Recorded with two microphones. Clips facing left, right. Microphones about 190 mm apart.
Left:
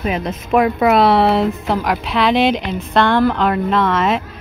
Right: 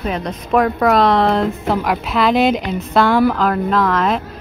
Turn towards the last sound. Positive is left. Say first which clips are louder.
# even
turn(degrees=0)  # may be behind; listen again after turning